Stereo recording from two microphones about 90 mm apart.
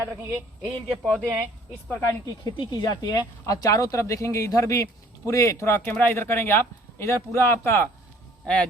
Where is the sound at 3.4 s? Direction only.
40° left (ahead or behind).